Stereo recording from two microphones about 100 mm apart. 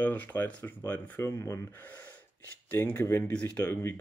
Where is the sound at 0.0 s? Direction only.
20° left (ahead or behind).